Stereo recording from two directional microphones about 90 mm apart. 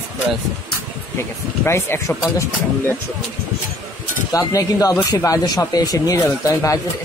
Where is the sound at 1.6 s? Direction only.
30° left (ahead or behind).